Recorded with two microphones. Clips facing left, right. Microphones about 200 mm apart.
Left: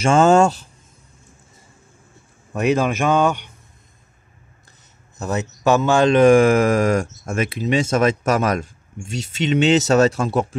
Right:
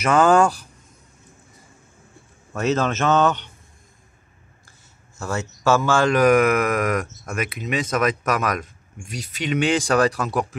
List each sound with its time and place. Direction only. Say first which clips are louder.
0.0 s a man's voice: left 2 dB; 25° left (ahead or behind)
2.5 s speech: left 3 dB; 15° left (ahead or behind)
4.6 s a man's voice: left 1 dB; 20° left (ahead or behind)